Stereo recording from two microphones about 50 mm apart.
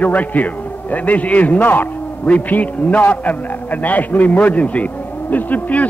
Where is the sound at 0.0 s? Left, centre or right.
Left.